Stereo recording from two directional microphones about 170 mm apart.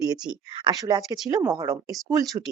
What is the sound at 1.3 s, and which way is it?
Speech, 20° right (ahead or behind).